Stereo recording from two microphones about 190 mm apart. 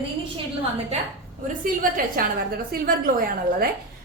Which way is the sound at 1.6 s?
45° right (ahead or behind).